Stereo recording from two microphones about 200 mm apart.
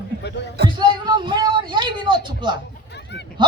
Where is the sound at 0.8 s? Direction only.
20° right (ahead or behind).